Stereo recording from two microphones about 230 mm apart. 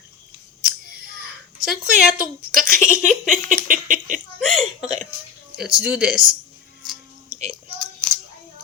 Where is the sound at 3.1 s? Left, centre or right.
Centre.